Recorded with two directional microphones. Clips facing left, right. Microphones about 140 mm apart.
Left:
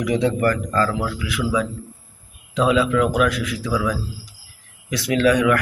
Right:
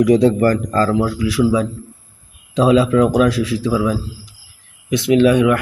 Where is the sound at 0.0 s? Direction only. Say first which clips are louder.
Right 7 dB; 35° right (ahead or behind).